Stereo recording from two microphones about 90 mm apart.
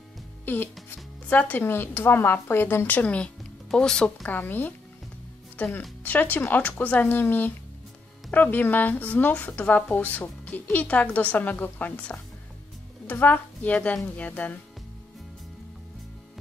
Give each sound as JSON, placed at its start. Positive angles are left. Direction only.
{"t": 0.5, "sound": "speech", "side_deg": 20}
{"t": 4.3, "sound": "a woman's voice", "side_deg": 20}